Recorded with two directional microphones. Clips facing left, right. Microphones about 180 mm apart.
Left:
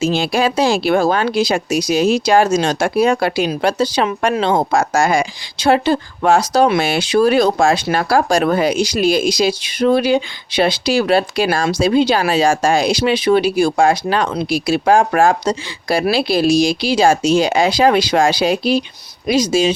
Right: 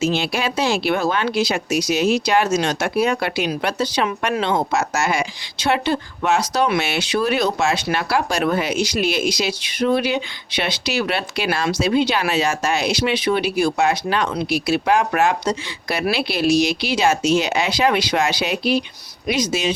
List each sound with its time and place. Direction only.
0.0 s speech: 35° left (ahead or behind)